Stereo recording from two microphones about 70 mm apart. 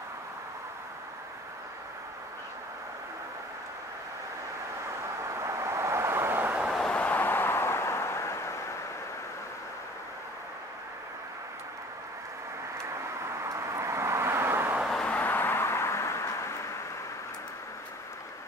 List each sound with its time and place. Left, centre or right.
5.2 s vehicle: right
6.8 s vehicle: centre; by 8.7 s left
12.7 s vehicle: right
15.0 s vehicle: left